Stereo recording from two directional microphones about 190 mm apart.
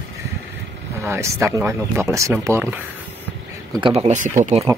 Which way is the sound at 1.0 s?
15° right (ahead or behind).